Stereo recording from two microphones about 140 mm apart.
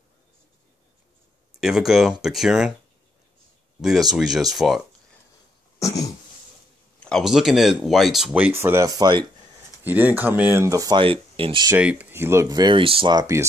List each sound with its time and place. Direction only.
1.6 s speech: centre (ahead or behind)
3.8 s speech: centre (ahead or behind)
5.8 s cough: 25° left (ahead or behind)
7.0 s speech: 5° left (ahead or behind)
8.5 s speech: 20° right (ahead or behind)
9.8 s speech: 10° right (ahead or behind)
11.0 s speech: 40° right (ahead or behind)
11.7 s speech: 10° right (ahead or behind)